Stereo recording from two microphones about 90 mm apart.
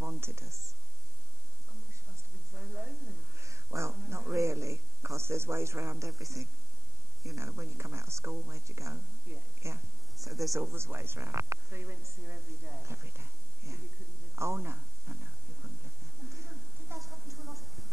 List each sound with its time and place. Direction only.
0.0 s speech: 30° right (ahead or behind)
2.5 s a man's voice: 30° right (ahead or behind)
10.6 s a woman's voice: 25° right (ahead or behind)
16.3 s a sound: 30° right (ahead or behind)